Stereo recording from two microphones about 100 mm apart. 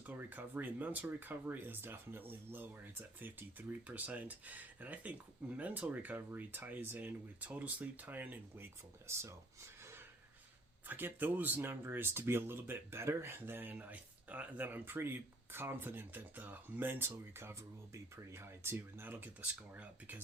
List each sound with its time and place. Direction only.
0.0 s speech: 20° right (ahead or behind)